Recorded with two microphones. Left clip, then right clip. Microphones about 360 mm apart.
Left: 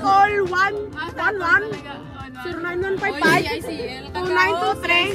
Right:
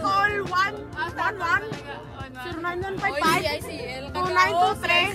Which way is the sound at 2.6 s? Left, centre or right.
Centre.